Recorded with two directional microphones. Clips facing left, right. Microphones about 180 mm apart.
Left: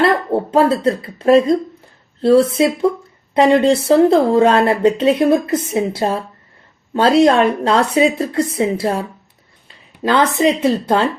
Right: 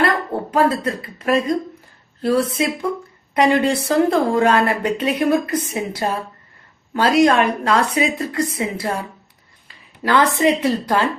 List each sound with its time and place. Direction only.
0.0 s speech: 30° left (ahead or behind)
3.3 s speech: 30° left (ahead or behind)
10.0 s speech: 20° left (ahead or behind)